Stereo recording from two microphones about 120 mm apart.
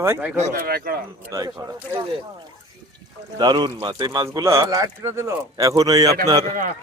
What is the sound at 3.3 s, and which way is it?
Speech, 35° right (ahead or behind).